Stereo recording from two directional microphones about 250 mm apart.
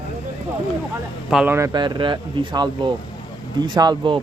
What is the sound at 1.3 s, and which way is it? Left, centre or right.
Speech, centre.